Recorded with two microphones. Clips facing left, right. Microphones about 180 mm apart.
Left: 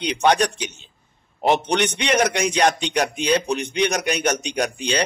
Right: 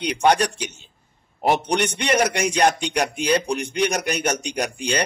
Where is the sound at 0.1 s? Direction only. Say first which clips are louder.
Even; 10° right (ahead or behind).